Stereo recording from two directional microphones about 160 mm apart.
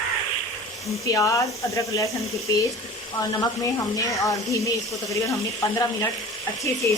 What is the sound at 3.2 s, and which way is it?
Speech, 20° left (ahead or behind).